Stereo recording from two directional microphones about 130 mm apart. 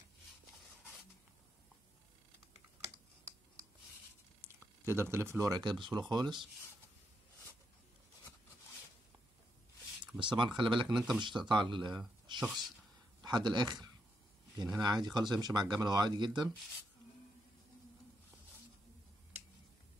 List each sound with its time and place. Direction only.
4.4 s a sound: 20° right (ahead or behind)
5.6 s speech: 35° right (ahead or behind)
10.1 s speech: 40° right (ahead or behind)
10.9 s speech: 5° right (ahead or behind)
11.2 s speech: 35° right (ahead or behind)
13.2 s speech: 35° right (ahead or behind)